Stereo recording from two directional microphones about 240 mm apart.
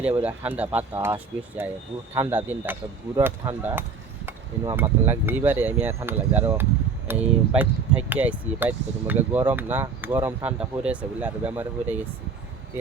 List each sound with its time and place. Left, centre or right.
0.0 s speech: centre